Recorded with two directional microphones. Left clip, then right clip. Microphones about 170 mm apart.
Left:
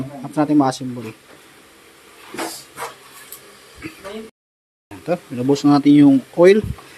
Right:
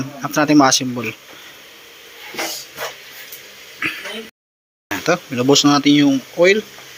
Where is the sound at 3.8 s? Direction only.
Centre (ahead or behind).